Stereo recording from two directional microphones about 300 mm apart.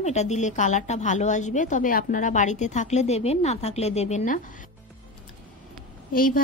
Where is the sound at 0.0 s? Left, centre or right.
Left.